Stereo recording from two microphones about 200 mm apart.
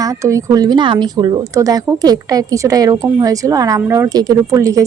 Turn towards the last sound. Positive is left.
turn(degrees=-15)  # may be behind; listen again after turning